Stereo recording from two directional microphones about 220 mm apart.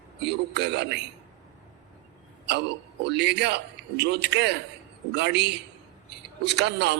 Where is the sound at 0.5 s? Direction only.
50° right (ahead or behind).